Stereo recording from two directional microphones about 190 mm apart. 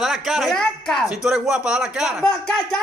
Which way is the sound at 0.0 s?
Centre (ahead or behind).